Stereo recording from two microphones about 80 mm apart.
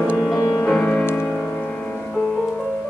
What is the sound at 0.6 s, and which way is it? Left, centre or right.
Music, centre.